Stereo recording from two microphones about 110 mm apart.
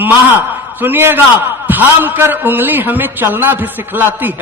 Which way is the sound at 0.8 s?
20° right (ahead or behind).